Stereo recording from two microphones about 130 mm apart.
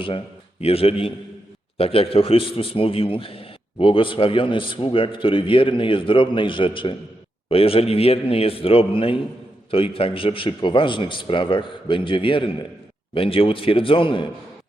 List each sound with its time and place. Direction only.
0.6 s a man's voice: 50° left (ahead or behind)